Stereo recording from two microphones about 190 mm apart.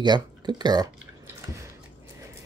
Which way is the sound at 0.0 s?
25° right (ahead or behind).